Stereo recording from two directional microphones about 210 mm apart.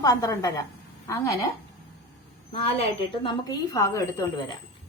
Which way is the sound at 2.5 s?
25° left (ahead or behind).